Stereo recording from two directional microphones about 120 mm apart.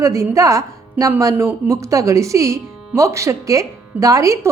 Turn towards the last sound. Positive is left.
turn(degrees=-25)  # may be behind; listen again after turning